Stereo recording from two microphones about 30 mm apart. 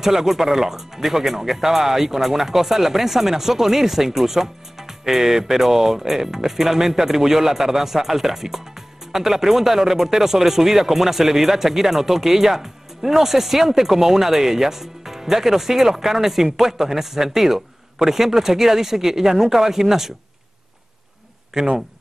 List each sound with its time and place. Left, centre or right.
0.0 s speech: centre